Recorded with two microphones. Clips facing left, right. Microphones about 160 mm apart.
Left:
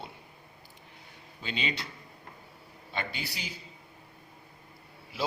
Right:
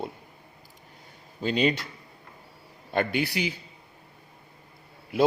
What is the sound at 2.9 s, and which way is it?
Speech, 60° right (ahead or behind).